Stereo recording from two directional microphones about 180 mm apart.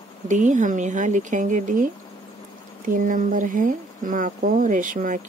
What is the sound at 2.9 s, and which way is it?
Speech, 50° right (ahead or behind).